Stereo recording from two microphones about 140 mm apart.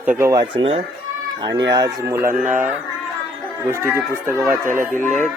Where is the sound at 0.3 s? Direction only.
25° right (ahead or behind).